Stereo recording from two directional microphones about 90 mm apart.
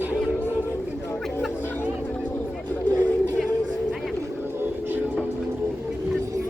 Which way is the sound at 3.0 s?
25° left (ahead or behind).